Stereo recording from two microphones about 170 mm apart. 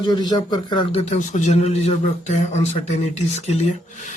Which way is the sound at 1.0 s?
45° left (ahead or behind).